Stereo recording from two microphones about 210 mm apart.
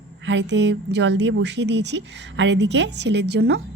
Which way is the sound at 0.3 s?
55° right (ahead or behind).